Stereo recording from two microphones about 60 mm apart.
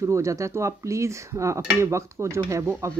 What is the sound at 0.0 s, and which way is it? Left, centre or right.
A woman's voice, right.